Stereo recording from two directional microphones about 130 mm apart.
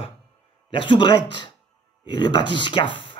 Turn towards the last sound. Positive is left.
turn(degrees=40)  # may be behind; listen again after turning